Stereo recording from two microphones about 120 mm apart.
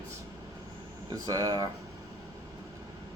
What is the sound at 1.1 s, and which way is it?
Speech, 30° right (ahead or behind).